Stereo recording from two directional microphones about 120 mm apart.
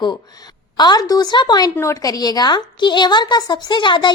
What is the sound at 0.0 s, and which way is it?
A woman's voice, 35° left (ahead or behind).